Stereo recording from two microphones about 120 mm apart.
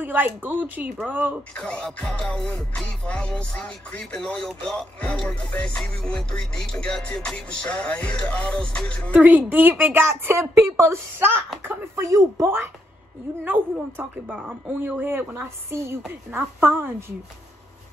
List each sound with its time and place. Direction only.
0.0 s speech: 15° right (ahead or behind)
1.6 s music: 5° left (ahead or behind)
9.1 s speech: 15° right (ahead or behind)